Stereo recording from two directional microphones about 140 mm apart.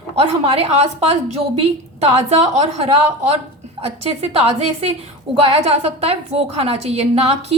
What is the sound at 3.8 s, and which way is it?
A woman's voice, 40° right (ahead or behind).